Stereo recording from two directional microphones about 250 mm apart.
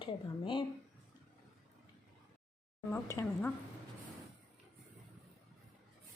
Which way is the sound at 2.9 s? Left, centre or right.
Centre.